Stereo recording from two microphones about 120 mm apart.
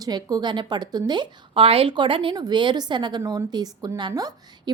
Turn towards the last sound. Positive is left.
turn(degrees=-35)  # may be behind; listen again after turning